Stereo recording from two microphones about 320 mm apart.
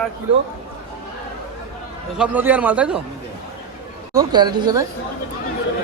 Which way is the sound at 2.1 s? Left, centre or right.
Centre.